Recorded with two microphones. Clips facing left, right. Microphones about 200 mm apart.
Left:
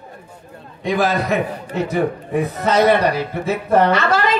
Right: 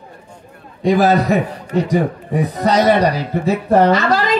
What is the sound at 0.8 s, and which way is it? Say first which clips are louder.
A woman's voice: right 5 dB; 40° right (ahead or behind).